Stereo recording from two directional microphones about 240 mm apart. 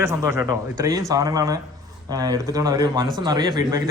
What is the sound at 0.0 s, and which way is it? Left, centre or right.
A man's voice, centre.